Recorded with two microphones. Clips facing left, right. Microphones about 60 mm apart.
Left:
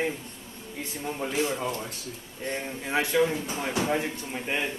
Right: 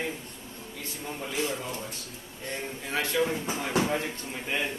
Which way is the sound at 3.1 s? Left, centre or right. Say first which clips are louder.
Left 2 dB; centre.